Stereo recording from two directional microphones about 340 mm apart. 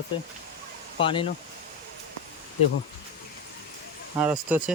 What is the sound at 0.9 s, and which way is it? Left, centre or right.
Speech, centre.